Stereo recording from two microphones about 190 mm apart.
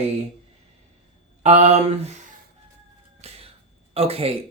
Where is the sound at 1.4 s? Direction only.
35° right (ahead or behind).